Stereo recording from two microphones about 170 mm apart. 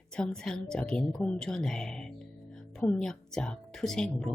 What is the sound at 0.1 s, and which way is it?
Speech, 5° left (ahead or behind).